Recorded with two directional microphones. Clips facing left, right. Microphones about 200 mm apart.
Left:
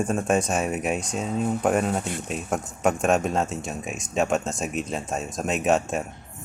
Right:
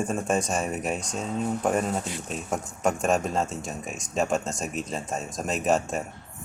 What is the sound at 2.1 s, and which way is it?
Speech, 55° left (ahead or behind).